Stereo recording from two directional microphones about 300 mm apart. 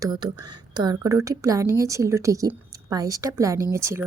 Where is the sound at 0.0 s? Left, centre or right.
Centre.